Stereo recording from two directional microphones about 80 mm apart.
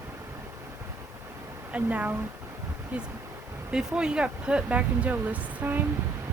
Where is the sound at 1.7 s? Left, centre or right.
Centre.